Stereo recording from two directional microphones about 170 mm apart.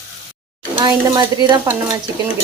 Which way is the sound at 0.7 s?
25° right (ahead or behind).